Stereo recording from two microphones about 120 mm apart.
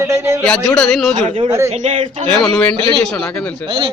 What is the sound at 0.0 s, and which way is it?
Speech, 20° right (ahead or behind).